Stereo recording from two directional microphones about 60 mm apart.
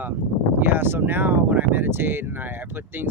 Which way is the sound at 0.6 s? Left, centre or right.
Right.